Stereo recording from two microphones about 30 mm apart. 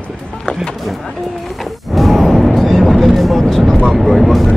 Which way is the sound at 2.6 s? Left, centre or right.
Centre.